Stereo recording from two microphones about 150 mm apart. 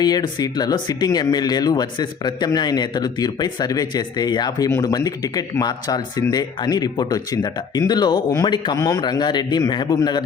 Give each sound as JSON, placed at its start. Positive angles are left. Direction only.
{"t": 0.0, "sound": "speech", "side_deg": 25}